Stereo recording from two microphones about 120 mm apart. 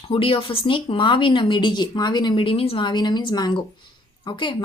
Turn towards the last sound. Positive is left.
turn(degrees=40)  # may be behind; listen again after turning